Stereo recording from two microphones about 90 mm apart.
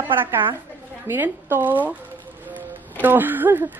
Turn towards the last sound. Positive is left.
turn(degrees=-20)  # may be behind; listen again after turning